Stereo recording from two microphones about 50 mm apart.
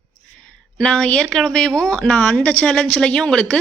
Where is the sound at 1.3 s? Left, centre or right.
Centre.